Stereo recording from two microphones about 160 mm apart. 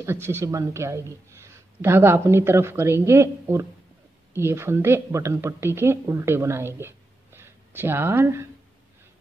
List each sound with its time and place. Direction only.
0.0 s a woman's voice: 15° right (ahead or behind)